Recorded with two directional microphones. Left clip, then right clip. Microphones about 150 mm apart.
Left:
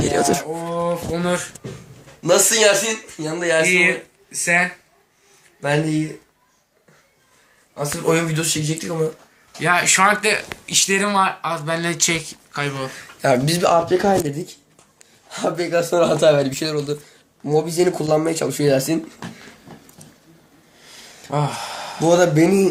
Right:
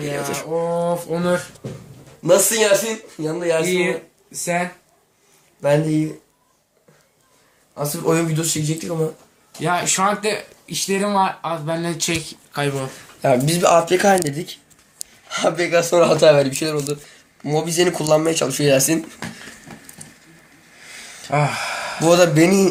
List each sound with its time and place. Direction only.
0.0 s a sound: 50° left (ahead or behind)
1.1 s speech: 35° right (ahead or behind)
2.2 s a man's voice: 20° left (ahead or behind)
3.2 s speech: 10° left (ahead or behind)
3.6 s speech: 30° left (ahead or behind)
4.4 s speech: 15° right (ahead or behind)
5.6 s speech: 10° left (ahead or behind)
7.8 s speech: centre (ahead or behind)
9.6 s speech: 15° right (ahead or behind)
12.5 s speech: 55° right (ahead or behind)
13.2 s speech: 5° right (ahead or behind)
21.2 s a sound: 45° right (ahead or behind)
22.0 s speech: 5° right (ahead or behind)